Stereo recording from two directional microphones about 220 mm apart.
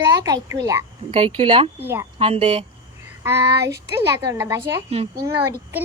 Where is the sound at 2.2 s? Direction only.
25° right (ahead or behind).